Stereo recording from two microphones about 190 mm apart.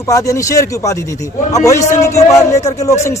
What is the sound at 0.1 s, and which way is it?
Speech, 15° left (ahead or behind).